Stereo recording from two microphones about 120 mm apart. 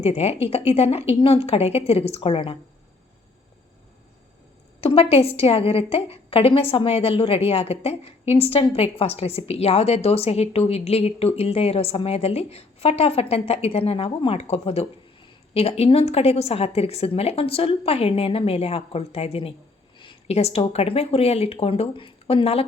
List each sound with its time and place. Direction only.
0.0 s a woman's voice: 60° left (ahead or behind)
4.8 s a woman's voice: 55° left (ahead or behind)
20.0 s a sound: 45° left (ahead or behind)
20.3 s a woman's voice: 55° left (ahead or behind)